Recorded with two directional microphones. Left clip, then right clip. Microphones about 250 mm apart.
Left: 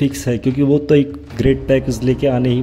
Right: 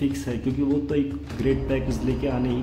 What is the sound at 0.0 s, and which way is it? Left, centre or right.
A man's voice, left.